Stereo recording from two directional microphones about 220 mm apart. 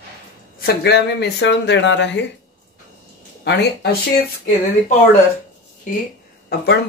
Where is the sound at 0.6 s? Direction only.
50° left (ahead or behind).